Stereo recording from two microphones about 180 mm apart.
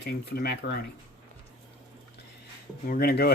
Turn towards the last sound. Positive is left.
turn(degrees=60)  # may be behind; listen again after turning